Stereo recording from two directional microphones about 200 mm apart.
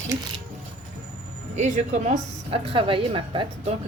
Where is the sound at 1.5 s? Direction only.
35° right (ahead or behind).